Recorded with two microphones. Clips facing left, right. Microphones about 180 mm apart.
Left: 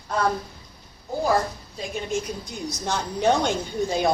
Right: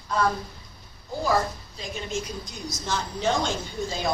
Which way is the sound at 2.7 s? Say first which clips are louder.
Left 2 dB; 60° left (ahead or behind).